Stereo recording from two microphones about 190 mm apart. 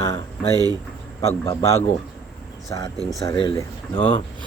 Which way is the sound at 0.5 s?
20° right (ahead or behind).